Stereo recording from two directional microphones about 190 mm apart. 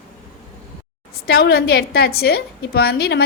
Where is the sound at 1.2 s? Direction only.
55° left (ahead or behind).